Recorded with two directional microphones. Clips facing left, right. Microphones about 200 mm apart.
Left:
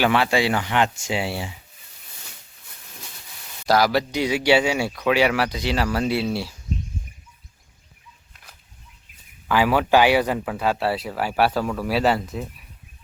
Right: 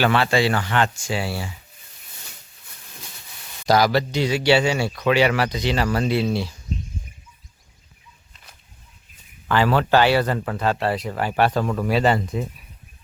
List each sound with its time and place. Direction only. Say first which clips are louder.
0.0 s speech: right 1 dB; 10° left (ahead or behind)
3.6 s speech: right 1 dB; 5° left (ahead or behind)
9.5 s speech: even; 10° left (ahead or behind)